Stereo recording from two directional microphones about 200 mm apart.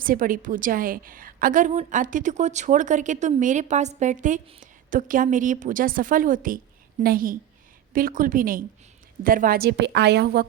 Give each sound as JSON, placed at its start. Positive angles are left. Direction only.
{"t": 0.0, "sound": "a woman's voice", "side_deg": -45}